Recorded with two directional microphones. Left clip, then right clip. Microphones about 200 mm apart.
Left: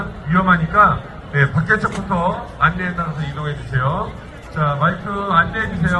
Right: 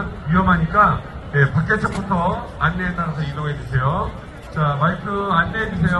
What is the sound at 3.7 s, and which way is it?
Speech, 20° left (ahead or behind).